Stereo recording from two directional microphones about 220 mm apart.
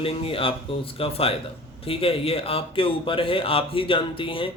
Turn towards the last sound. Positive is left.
turn(degrees=25)  # may be behind; listen again after turning